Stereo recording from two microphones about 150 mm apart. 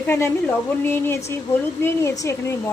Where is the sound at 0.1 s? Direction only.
15° left (ahead or behind).